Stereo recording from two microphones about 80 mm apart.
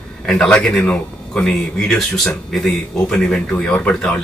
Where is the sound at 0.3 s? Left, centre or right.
Centre.